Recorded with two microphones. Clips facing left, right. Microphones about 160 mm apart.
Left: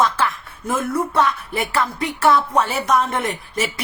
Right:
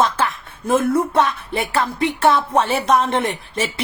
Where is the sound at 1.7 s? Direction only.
25° right (ahead or behind).